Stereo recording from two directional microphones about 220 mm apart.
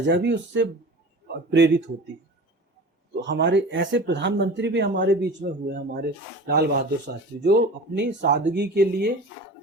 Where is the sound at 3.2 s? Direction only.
55° right (ahead or behind).